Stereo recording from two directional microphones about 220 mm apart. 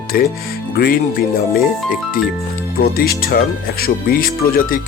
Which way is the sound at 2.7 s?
45° left (ahead or behind).